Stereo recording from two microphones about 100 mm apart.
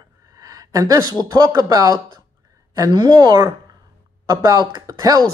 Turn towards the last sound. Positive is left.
turn(degrees=-40)  # may be behind; listen again after turning